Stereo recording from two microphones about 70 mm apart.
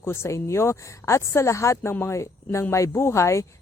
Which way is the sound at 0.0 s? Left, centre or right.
Left.